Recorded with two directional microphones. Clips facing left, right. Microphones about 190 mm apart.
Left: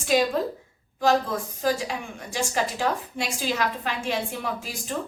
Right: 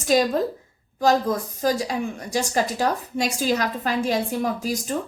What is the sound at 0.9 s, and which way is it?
A woman's voice, 40° right (ahead or behind).